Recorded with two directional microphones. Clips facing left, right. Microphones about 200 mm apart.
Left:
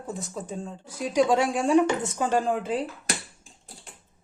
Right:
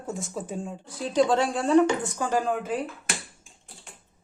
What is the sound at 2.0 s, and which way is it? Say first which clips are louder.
Speech: left 1 dB; 25° left (ahead or behind).